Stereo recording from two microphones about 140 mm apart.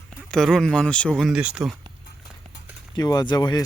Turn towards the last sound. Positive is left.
turn(degrees=30)  # may be behind; listen again after turning